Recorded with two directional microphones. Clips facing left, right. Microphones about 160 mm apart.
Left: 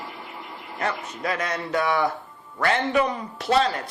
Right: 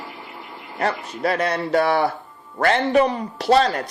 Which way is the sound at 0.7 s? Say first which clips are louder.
Right 4 dB; 35° right (ahead or behind).